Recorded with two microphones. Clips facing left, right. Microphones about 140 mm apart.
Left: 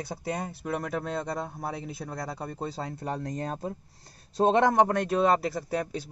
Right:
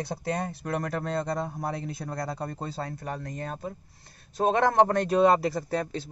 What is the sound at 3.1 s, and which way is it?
Speech, 35° left (ahead or behind).